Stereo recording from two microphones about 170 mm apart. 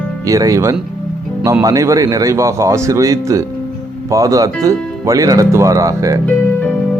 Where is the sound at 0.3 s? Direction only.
20° right (ahead or behind).